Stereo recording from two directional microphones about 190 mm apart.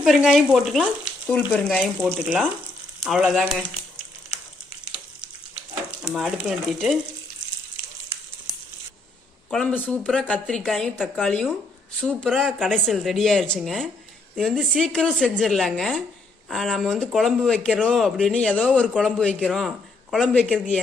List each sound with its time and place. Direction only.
0.0 s speech: centre (ahead or behind)
6.0 s speech: centre (ahead or behind)
9.5 s speech: 5° left (ahead or behind)